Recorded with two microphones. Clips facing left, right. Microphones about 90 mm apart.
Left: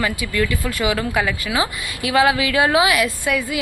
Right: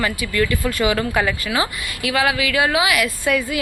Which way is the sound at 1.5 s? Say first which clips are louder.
Even; 20° left (ahead or behind).